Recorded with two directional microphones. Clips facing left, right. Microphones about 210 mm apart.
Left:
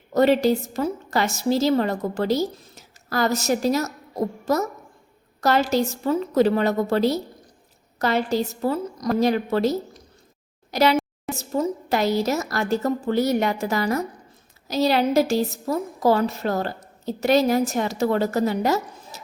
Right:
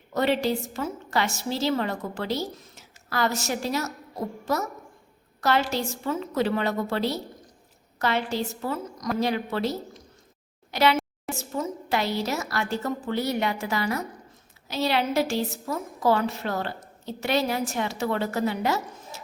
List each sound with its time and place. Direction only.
0.1 s a woman's voice: 40° left (ahead or behind)